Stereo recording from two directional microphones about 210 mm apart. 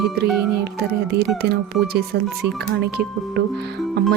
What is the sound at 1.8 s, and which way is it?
Speech, 50° right (ahead or behind).